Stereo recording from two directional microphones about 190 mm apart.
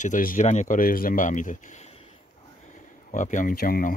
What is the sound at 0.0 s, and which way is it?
Speech, 45° left (ahead or behind).